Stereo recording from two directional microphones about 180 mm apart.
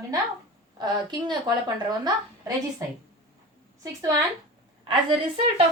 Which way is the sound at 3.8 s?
20° right (ahead or behind).